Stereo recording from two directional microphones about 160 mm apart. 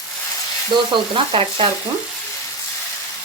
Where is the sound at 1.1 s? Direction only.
35° right (ahead or behind).